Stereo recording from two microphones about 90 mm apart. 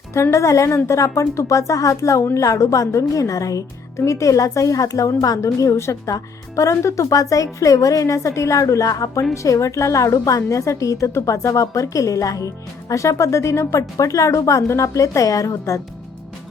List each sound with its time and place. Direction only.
0.1 s speech: 35° left (ahead or behind)